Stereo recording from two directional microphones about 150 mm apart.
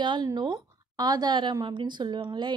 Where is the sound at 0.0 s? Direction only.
30° right (ahead or behind).